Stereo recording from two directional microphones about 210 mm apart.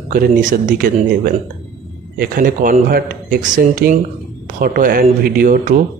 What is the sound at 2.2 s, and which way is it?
Speech, 40° right (ahead or behind).